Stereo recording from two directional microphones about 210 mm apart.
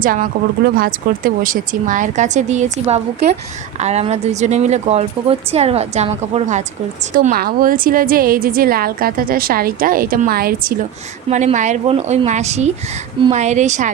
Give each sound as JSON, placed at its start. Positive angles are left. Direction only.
{"t": 0.0, "sound": "a woman's voice", "side_deg": -40}
{"t": 11.3, "sound": "speech", "side_deg": -35}